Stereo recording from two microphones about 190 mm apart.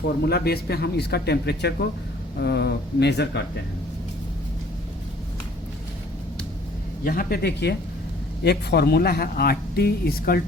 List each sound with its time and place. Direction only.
0.2 s speech: 55° left (ahead or behind)
7.0 s speech: 50° left (ahead or behind)